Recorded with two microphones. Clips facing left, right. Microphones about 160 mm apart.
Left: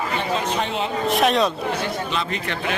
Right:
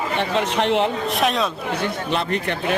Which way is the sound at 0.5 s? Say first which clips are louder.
Right 5 dB; 70° right (ahead or behind).